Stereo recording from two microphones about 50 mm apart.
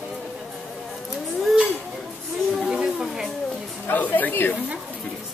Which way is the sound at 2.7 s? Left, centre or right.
Centre.